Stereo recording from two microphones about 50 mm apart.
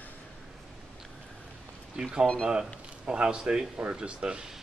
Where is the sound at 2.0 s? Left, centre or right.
Centre.